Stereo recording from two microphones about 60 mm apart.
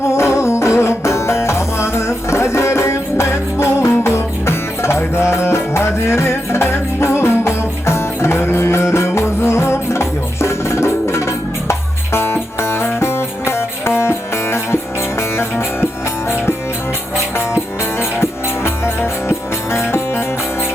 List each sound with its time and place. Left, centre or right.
0.0 s music: left
17.9 s music: left